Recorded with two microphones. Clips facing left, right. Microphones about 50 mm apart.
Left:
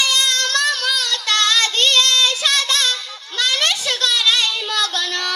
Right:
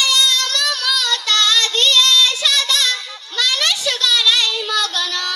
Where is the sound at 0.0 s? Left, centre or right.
Left.